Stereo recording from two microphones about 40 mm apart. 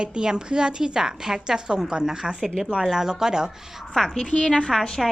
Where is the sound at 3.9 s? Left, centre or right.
Centre.